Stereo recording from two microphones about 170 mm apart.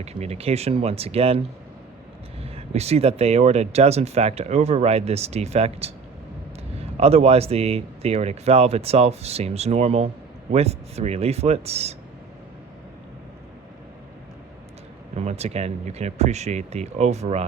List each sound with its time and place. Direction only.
0.0 s speech: 40° right (ahead or behind)
2.4 s speech: 35° right (ahead or behind)
15.1 s speech: 40° right (ahead or behind)